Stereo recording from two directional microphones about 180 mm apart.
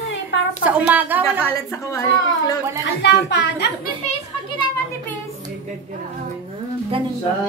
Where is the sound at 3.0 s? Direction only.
70° left (ahead or behind).